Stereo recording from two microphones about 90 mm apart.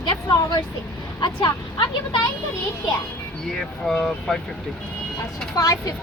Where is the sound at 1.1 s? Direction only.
55° left (ahead or behind).